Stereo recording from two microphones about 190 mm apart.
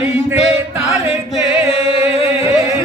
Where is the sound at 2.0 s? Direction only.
15° right (ahead or behind).